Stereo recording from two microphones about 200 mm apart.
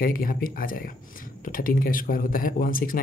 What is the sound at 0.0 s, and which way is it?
Speech, 45° left (ahead or behind).